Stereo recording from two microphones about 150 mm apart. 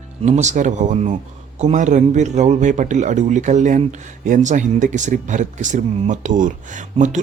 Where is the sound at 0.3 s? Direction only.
50° right (ahead or behind).